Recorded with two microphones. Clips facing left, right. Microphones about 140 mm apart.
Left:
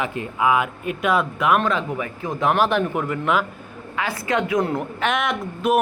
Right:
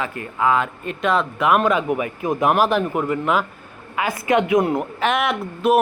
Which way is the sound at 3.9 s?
20° right (ahead or behind).